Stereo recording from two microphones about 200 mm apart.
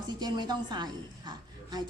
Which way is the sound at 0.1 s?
20° right (ahead or behind).